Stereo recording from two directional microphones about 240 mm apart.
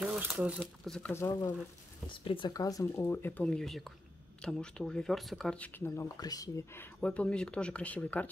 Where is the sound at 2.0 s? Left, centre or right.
Left.